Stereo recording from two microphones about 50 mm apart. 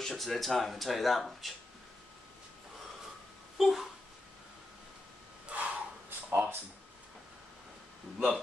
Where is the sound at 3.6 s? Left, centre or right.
Centre.